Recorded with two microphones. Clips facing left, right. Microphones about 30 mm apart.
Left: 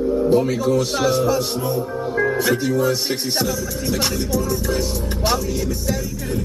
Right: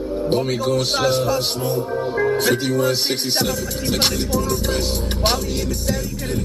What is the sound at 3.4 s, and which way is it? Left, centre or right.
Music, right.